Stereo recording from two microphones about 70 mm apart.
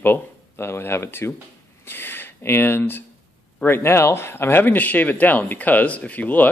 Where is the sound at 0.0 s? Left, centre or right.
Left.